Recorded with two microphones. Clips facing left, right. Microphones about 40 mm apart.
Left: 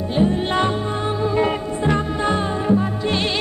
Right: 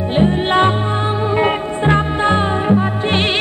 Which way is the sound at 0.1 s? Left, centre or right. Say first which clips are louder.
Right 4 dB; right.